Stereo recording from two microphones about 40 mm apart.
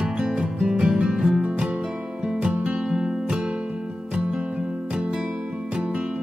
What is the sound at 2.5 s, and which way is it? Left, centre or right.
Music, right.